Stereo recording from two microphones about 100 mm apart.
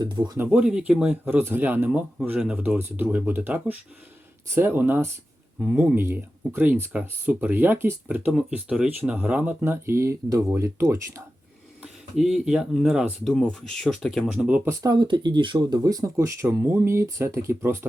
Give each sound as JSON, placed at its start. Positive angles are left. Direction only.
{"t": 0.0, "sound": "speech", "side_deg": -45}
{"t": 0.3, "sound": "speech", "side_deg": -10}
{"t": 1.2, "sound": "speech", "side_deg": -20}
{"t": 9.0, "sound": "speech", "side_deg": -15}
{"t": 11.8, "sound": "speech", "side_deg": -5}
{"t": 13.3, "sound": "speech", "side_deg": 5}
{"t": 14.4, "sound": "speech", "side_deg": -15}
{"t": 14.7, "sound": "speech", "side_deg": -35}
{"t": 14.9, "sound": "speech", "side_deg": -50}
{"t": 15.7, "sound": "speech", "side_deg": -35}